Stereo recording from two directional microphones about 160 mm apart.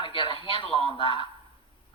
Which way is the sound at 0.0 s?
30° left (ahead or behind).